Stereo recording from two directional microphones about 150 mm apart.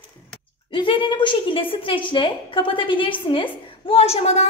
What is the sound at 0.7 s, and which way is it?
A woman's voice, 35° left (ahead or behind).